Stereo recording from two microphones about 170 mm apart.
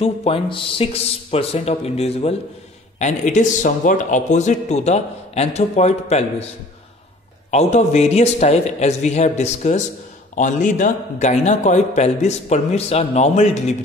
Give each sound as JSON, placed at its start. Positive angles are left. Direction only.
{"t": 0.0, "sound": "a man's voice", "side_deg": 35}
{"t": 7.5, "sound": "a man's voice", "side_deg": 40}